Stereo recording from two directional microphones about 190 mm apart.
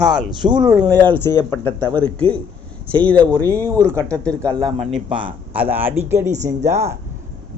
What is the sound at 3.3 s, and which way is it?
Speech, 15° right (ahead or behind).